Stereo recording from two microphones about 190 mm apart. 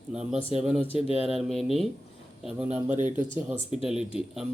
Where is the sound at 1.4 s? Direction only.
Centre (ahead or behind).